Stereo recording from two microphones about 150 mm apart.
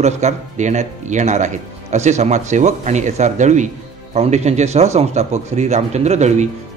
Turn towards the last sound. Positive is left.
turn(degrees=-50)  # may be behind; listen again after turning